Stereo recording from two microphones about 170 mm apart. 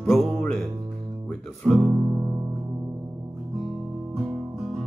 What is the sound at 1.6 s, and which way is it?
Guitar, centre (ahead or behind).